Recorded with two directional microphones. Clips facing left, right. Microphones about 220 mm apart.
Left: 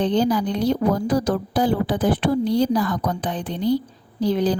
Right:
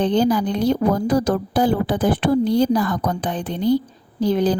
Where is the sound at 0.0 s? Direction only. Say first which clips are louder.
Right 2 dB; 50° right (ahead or behind).